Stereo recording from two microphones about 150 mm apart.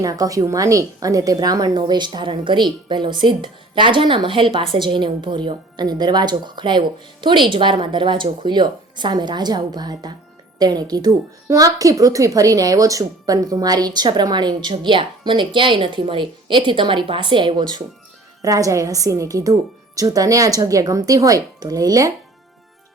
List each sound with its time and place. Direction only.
0.0 s a woman's voice: 25° right (ahead or behind)